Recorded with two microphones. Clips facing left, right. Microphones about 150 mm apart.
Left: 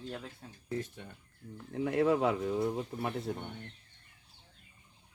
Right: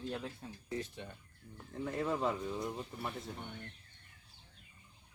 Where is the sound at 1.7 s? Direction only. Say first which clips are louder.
Left 8 dB; 70° left (ahead or behind).